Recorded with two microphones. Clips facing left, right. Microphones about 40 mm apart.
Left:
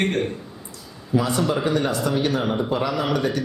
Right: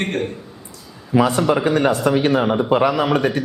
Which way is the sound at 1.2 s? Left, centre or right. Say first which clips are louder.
Right 5 dB; right.